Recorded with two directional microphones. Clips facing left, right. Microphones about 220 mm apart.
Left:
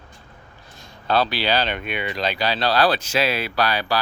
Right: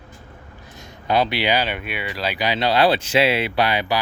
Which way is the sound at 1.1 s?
20° right (ahead or behind).